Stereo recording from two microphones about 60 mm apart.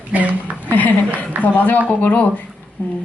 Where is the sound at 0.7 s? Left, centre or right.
Left.